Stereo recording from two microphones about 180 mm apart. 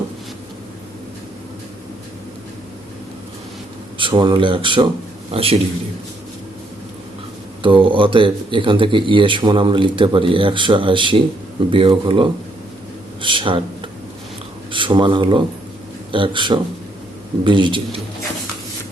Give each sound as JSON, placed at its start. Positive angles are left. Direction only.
{"t": 3.9, "sound": "a man's voice", "side_deg": -25}
{"t": 7.6, "sound": "speech", "side_deg": -30}
{"t": 14.7, "sound": "speech", "side_deg": -25}